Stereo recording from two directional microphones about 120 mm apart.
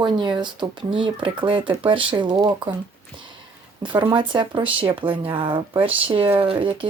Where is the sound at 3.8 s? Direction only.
40° right (ahead or behind).